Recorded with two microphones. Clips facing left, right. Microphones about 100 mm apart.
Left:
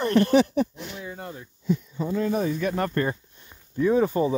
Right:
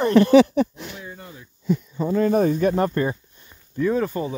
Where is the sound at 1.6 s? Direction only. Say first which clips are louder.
Right 3 dB; 50° right (ahead or behind).